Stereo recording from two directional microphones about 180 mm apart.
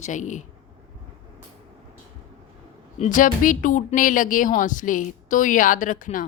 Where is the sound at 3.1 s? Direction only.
50° left (ahead or behind).